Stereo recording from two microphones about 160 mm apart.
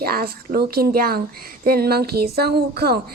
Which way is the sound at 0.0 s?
70° right (ahead or behind).